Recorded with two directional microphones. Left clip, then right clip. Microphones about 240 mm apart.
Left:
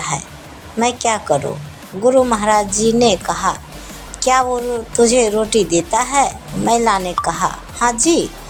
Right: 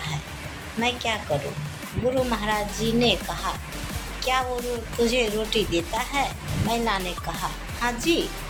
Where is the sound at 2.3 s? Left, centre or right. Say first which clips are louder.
Left 11 dB; left.